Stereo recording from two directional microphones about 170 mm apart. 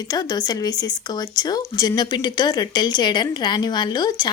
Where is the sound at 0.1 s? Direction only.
25° left (ahead or behind).